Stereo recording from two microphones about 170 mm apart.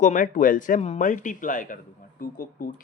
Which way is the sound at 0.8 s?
40° left (ahead or behind).